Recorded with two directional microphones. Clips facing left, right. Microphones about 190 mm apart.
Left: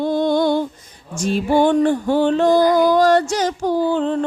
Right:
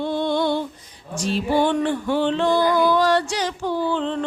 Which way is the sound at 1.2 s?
50° left (ahead or behind).